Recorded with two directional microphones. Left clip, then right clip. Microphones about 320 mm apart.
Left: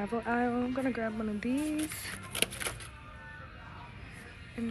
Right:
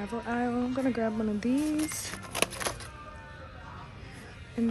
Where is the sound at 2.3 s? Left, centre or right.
Centre.